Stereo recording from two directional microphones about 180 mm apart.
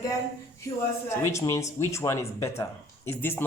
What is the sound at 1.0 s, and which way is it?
Speech, 15° left (ahead or behind).